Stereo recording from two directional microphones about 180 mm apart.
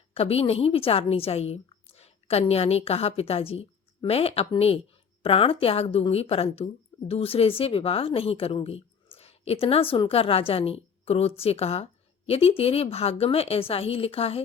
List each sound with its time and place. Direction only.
0.1 s a woman's voice: 35° left (ahead or behind)